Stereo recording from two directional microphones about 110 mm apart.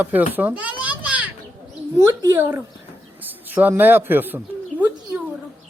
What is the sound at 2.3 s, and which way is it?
Speech, 20° right (ahead or behind).